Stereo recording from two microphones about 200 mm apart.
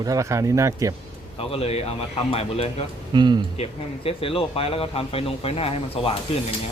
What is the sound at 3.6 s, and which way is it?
A man's voice, 30° left (ahead or behind).